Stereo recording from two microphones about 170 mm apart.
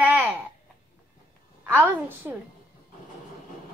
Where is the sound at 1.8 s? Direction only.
10° right (ahead or behind).